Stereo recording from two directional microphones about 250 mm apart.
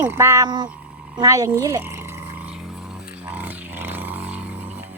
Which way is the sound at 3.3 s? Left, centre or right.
Centre.